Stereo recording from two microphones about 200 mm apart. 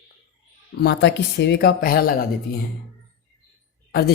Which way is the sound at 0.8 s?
55° left (ahead or behind).